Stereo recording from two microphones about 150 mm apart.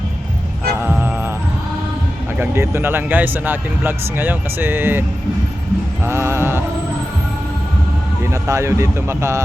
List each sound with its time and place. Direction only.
0.8 s music: 10° right (ahead or behind)
2.4 s speech: 15° right (ahead or behind)
6.1 s a sound: 15° right (ahead or behind)
8.3 s a man's voice: 20° right (ahead or behind)